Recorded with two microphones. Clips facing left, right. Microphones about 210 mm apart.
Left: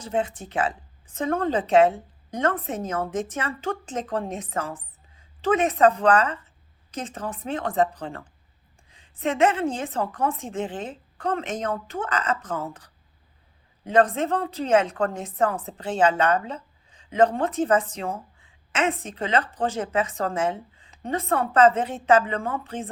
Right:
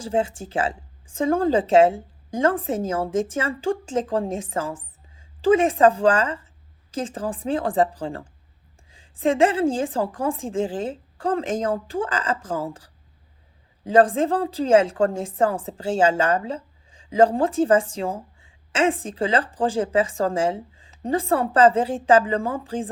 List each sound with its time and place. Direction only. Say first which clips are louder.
0.0 s a woman's voice: right 3 dB; 30° right (ahead or behind)